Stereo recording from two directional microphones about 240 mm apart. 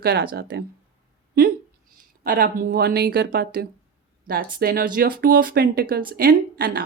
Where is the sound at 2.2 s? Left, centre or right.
Right.